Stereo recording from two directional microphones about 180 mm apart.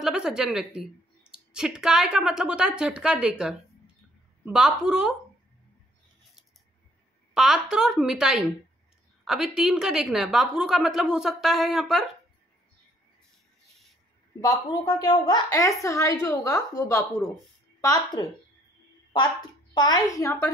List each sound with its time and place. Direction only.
0.0 s a woman's voice: 5° right (ahead or behind)
7.3 s a woman's voice: centre (ahead or behind)
14.4 s a woman's voice: 20° left (ahead or behind)
19.7 s a woman's voice: 25° left (ahead or behind)